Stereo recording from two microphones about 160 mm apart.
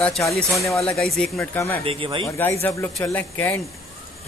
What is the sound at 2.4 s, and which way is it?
A man's voice, 15° left (ahead or behind).